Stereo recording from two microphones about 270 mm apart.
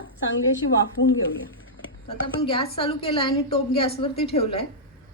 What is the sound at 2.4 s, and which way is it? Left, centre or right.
A woman's voice, centre.